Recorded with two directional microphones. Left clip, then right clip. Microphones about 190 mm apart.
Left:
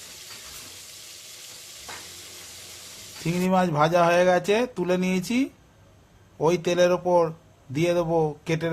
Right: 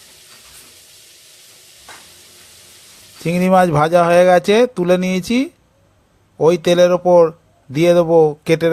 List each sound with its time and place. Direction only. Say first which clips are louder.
3.2 s speech: right 11 dB; 40° right (ahead or behind)